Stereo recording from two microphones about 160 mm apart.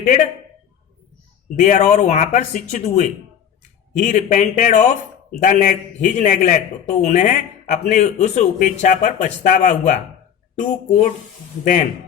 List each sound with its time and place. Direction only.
0.0 s a man's voice: 50° left (ahead or behind)
1.5 s a man's voice: 50° left (ahead or behind)